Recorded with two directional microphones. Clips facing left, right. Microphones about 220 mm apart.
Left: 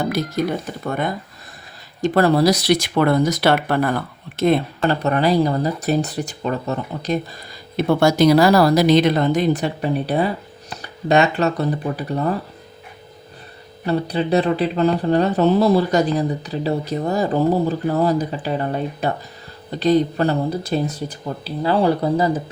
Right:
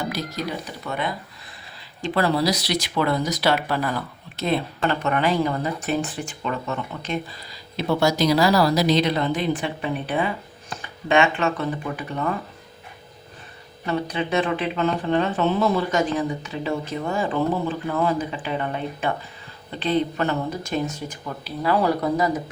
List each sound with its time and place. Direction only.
0.0 s speech: 50° left (ahead or behind)
4.8 s speech: 35° left (ahead or behind)
13.8 s speech: 35° left (ahead or behind)